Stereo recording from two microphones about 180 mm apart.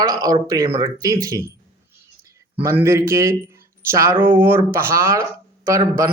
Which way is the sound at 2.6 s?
15° right (ahead or behind).